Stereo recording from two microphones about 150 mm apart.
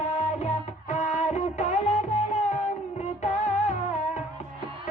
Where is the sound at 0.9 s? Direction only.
50° left (ahead or behind).